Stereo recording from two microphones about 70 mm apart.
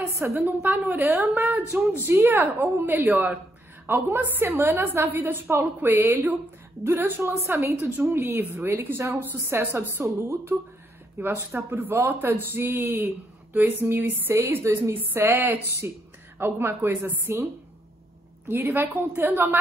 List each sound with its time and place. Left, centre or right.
0.2 s speech: right
0.7 s a woman's voice: right
1.3 s speech: right
2.0 s a woman's voice: right
11.1 s a woman's voice: right
18.5 s speech: right